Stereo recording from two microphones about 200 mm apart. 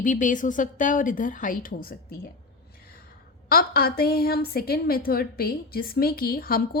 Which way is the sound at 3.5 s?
50° left (ahead or behind).